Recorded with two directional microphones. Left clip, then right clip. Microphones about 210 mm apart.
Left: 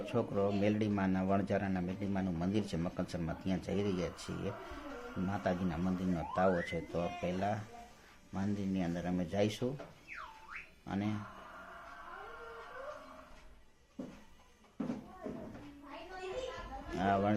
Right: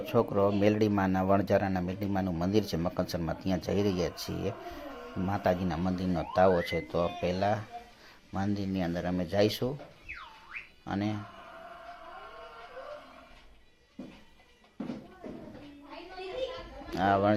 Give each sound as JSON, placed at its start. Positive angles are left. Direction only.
{"t": 0.0, "sound": "speech", "side_deg": -15}
{"t": 10.8, "sound": "speech", "side_deg": -15}
{"t": 16.9, "sound": "speech", "side_deg": -15}